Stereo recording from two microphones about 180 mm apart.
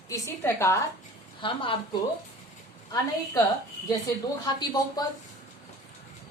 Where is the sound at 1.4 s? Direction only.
30° left (ahead or behind).